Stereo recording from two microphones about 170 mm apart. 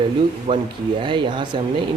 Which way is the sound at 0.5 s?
35° right (ahead or behind).